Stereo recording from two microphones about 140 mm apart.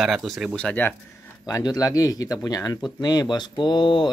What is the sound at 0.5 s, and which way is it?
Speech, 10° left (ahead or behind).